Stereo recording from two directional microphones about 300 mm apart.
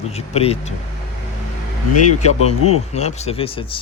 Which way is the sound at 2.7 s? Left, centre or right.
Left.